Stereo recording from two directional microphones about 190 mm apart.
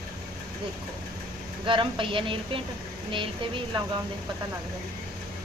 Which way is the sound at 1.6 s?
25° right (ahead or behind).